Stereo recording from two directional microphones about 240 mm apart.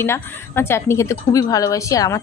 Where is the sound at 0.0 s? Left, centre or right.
Centre.